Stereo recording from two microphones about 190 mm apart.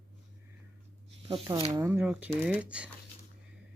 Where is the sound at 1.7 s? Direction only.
15° right (ahead or behind).